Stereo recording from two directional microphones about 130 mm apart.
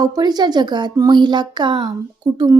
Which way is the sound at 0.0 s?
30° right (ahead or behind).